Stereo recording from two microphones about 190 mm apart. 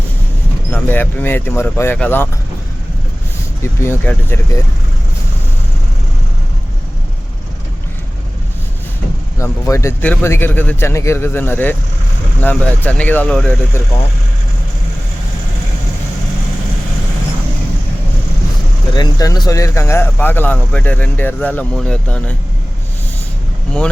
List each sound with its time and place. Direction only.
0.7 s speech: 10° left (ahead or behind)
3.6 s speech: 10° left (ahead or behind)
9.4 s speech: 15° left (ahead or behind)
18.9 s speech: 20° left (ahead or behind); by 22.4 s 5° left (ahead or behind)